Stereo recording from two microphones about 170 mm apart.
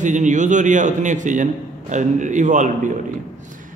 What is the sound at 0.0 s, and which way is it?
A man's voice, 45° right (ahead or behind).